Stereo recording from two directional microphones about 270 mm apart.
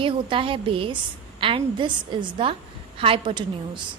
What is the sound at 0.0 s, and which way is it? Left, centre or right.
A woman's voice, centre.